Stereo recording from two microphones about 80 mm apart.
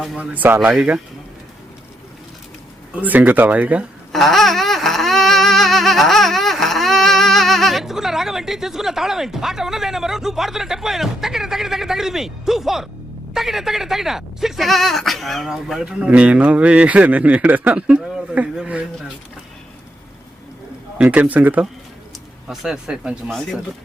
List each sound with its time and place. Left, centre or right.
0.2 s speech: centre
2.9 s speech: centre
4.1 s a sound: centre
13.3 s speech: centre
21.0 s speech: centre
22.4 s speech: centre